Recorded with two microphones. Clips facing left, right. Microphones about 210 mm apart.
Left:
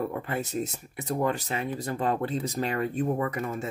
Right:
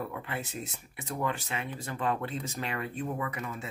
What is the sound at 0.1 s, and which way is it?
Speech, 40° left (ahead or behind).